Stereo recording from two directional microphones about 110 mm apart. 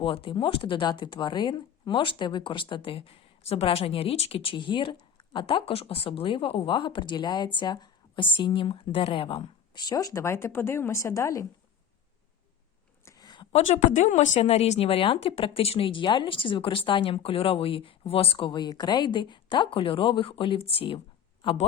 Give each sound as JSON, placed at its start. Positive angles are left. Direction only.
{"t": 0.0, "sound": "speech", "side_deg": 55}
{"t": 9.8, "sound": "speech", "side_deg": 35}
{"t": 13.1, "sound": "a sound", "side_deg": 40}
{"t": 13.5, "sound": "speech", "side_deg": 90}